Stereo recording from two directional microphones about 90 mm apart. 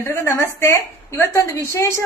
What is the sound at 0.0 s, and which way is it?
A woman's voice, 25° left (ahead or behind).